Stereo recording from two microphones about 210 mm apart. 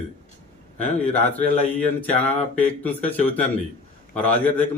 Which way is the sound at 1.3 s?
30° left (ahead or behind).